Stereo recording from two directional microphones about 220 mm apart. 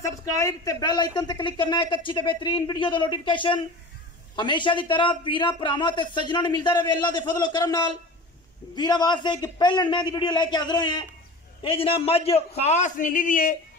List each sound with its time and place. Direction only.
0.0 s a woman's voice: 15° left (ahead or behind); by 13.6 s 40° left (ahead or behind)